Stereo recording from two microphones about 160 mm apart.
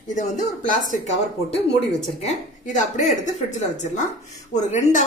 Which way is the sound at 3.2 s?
50° left (ahead or behind).